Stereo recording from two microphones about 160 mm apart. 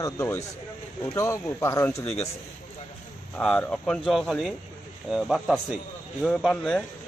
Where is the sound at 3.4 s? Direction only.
5° left (ahead or behind).